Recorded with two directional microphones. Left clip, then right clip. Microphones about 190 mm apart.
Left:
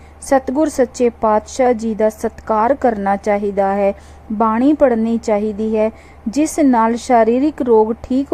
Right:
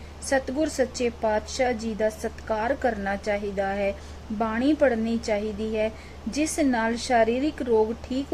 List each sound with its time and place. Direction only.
0.3 s a woman's voice: 35° left (ahead or behind)